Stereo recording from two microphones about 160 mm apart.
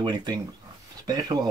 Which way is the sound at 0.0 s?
25° right (ahead or behind).